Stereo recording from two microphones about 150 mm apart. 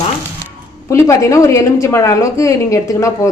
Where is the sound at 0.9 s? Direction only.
20° left (ahead or behind).